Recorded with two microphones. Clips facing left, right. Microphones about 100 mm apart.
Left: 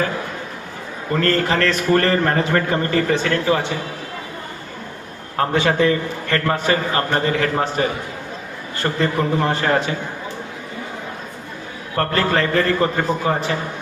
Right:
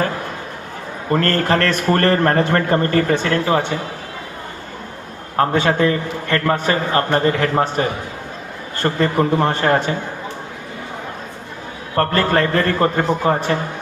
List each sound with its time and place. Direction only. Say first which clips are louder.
1.1 s a man's voice: right 2 dB; 50° right (ahead or behind)
5.4 s a man's voice: right 1 dB; 35° right (ahead or behind)
11.9 s a man's voice: right 2 dB; 45° right (ahead or behind)